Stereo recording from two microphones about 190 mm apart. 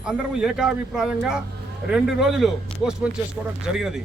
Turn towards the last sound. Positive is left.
turn(degrees=-5)  # may be behind; listen again after turning